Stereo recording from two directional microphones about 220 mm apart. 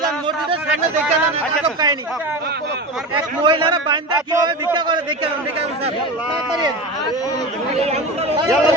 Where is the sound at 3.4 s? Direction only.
20° right (ahead or behind).